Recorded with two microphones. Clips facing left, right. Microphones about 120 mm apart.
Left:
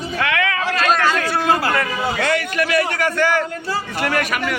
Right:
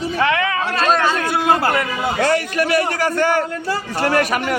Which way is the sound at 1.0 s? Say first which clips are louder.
Even; 20° right (ahead or behind).